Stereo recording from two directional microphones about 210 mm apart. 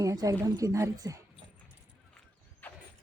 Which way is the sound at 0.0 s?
15° right (ahead or behind).